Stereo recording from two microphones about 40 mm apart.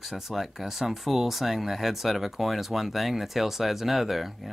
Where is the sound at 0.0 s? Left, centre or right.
Centre.